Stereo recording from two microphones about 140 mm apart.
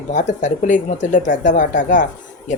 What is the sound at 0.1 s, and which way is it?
Speech, 60° left (ahead or behind).